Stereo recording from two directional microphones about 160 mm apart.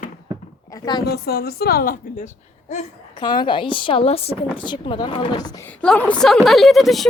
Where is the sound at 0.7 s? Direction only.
25° left (ahead or behind).